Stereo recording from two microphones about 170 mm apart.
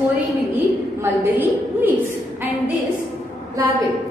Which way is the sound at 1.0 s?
10° right (ahead or behind).